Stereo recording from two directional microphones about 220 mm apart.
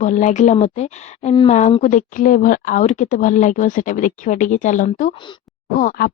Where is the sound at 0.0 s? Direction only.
35° left (ahead or behind).